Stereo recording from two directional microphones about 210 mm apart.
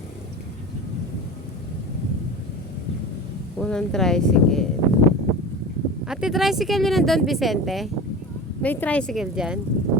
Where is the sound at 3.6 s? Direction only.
5° left (ahead or behind).